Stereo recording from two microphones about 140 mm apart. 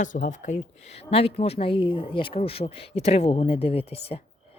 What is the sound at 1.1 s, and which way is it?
A woman's voice, 45° left (ahead or behind).